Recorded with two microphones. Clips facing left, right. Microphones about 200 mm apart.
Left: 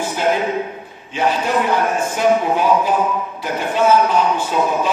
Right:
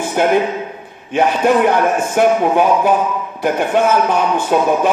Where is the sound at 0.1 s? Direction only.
55° right (ahead or behind).